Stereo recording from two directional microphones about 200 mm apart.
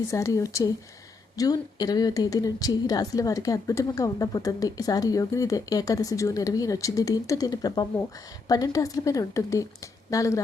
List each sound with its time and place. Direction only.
0.1 s a woman's voice: 15° left (ahead or behind)